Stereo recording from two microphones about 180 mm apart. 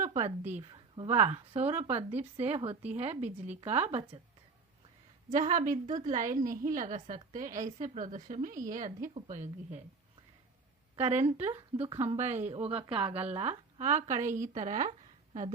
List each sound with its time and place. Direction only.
0.0 s a sound: 35° right (ahead or behind)
0.5 s speech: 30° right (ahead or behind)
5.4 s a woman's voice: 45° right (ahead or behind)
10.9 s speech: 35° right (ahead or behind)